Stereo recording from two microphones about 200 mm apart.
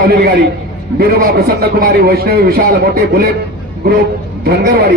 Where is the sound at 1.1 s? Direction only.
50° right (ahead or behind).